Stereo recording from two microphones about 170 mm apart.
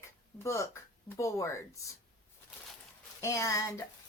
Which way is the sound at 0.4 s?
15° left (ahead or behind).